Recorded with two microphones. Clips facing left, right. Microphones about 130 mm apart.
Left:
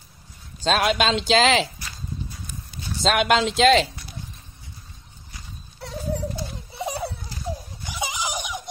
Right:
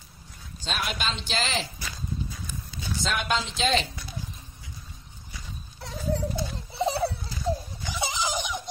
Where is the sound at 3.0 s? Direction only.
80° left.